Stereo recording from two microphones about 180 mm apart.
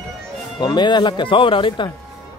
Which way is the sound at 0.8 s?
25° left (ahead or behind).